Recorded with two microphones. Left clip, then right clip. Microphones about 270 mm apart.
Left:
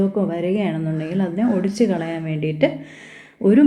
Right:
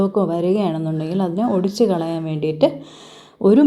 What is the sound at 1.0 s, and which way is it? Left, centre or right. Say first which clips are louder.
A woman's voice: right 1 dB; centre.